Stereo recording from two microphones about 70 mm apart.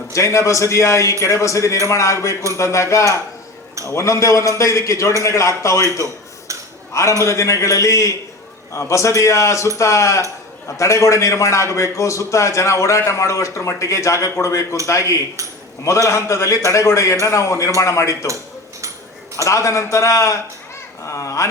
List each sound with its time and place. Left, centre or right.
0.1 s a man's voice: left
6.5 s dishes: right
7.2 s a man's voice: left
19.5 s a man's voice: left